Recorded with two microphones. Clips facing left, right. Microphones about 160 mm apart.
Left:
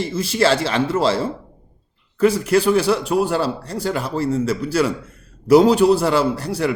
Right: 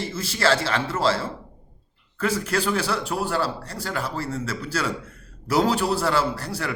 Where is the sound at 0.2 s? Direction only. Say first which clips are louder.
Left 5 dB; 15° left (ahead or behind).